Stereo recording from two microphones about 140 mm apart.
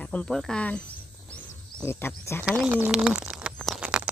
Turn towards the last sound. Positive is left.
turn(degrees=-5)  # may be behind; listen again after turning